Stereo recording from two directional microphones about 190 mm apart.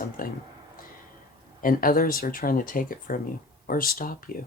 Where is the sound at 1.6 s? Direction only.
50° left (ahead or behind).